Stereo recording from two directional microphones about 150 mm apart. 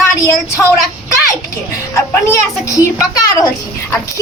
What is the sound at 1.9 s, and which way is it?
A woman's voice, 20° left (ahead or behind).